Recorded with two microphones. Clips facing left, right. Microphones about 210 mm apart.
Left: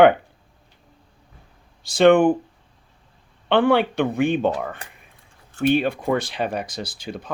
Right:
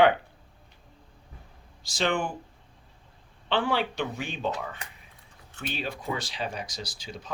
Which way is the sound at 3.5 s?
60° left (ahead or behind).